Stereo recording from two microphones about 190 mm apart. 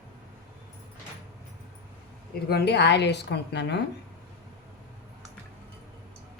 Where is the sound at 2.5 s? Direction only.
60° left (ahead or behind).